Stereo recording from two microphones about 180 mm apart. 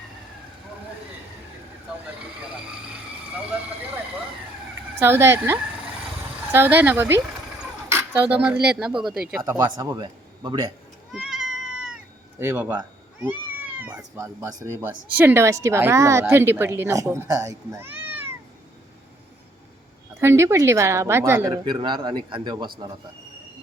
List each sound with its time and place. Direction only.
4.9 s speech: 15° right (ahead or behind)
8.5 s speech: 65° right (ahead or behind)
9.6 s speech: 20° right (ahead or behind)
11.1 s cat: centre (ahead or behind)
12.4 s speech: 10° right (ahead or behind)
20.1 s speech: 15° right (ahead or behind)